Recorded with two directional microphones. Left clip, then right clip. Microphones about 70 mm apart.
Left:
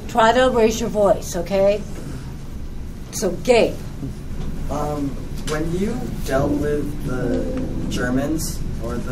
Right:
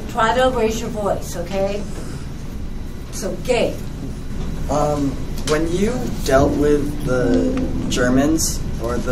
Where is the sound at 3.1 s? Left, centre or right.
Left.